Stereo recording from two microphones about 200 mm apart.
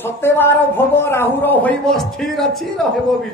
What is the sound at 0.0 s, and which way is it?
Speech, 10° left (ahead or behind).